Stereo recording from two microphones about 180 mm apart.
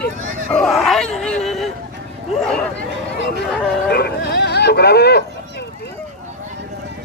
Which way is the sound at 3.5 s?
5° left (ahead or behind).